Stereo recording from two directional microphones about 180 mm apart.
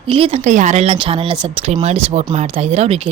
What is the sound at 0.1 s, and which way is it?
A woman's voice, 30° right (ahead or behind).